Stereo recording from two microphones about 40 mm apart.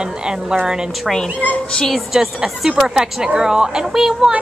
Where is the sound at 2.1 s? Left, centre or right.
Centre.